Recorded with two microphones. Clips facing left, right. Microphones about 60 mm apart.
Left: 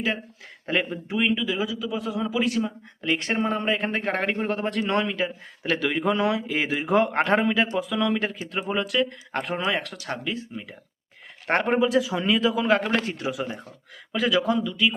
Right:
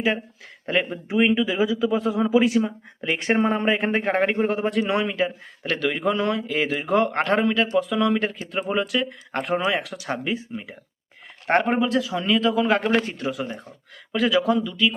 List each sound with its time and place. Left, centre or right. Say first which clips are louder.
0.6 s speech: right 2 dB; centre
1.0 s a man's voice: right 4 dB; centre
11.4 s a man's voice: right 1 dB; centre